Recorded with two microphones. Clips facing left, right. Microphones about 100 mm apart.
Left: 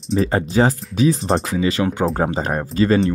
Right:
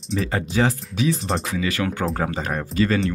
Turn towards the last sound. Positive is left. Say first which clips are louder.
# left 4 dB
turn(degrees=35)  # may be behind; listen again after turning